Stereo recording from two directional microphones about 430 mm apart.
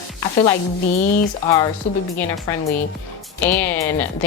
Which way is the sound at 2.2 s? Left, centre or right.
Centre.